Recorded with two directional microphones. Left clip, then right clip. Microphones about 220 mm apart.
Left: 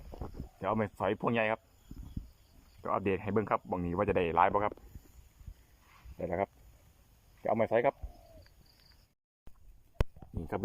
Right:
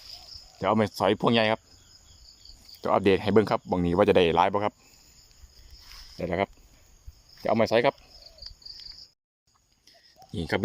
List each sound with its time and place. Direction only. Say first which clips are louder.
0.6 s speech: right 8 dB; 20° right (ahead or behind)
2.8 s speech: right 10 dB; 30° right (ahead or behind)
6.1 s speech: right 6 dB; 20° right (ahead or behind)